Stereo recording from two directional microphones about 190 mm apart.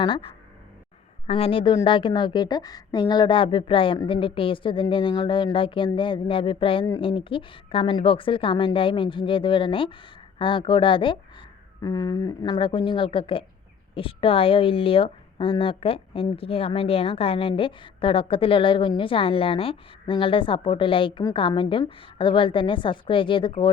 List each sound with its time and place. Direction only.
0.0 s speech: 25° left (ahead or behind)
1.3 s speech: 30° left (ahead or behind)